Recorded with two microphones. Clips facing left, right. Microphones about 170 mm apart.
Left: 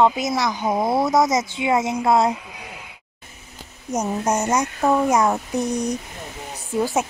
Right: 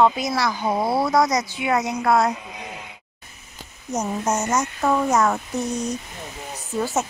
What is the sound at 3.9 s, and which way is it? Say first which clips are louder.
A woman's voice: left 2 dB; 10° left (ahead or behind).